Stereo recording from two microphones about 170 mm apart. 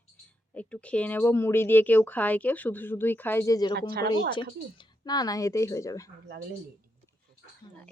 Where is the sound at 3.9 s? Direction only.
70° right (ahead or behind).